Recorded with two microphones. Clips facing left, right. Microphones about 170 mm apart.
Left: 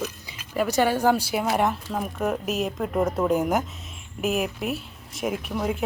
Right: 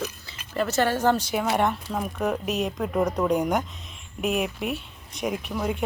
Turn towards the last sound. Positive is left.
turn(degrees=0)  # may be behind; listen again after turning